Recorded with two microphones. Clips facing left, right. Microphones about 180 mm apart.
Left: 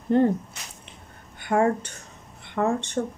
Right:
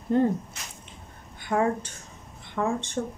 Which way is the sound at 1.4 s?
65° left (ahead or behind).